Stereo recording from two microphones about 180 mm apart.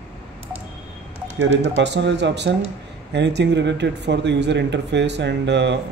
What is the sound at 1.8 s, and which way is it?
Speech, 75° right (ahead or behind).